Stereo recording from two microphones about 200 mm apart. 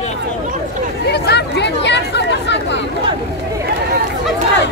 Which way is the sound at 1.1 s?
55° left (ahead or behind).